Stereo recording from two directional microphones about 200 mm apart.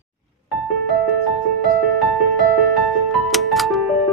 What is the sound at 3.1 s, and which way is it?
Music, centre (ahead or behind).